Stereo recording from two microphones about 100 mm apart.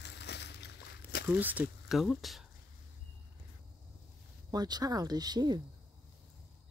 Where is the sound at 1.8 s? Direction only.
5° right (ahead or behind).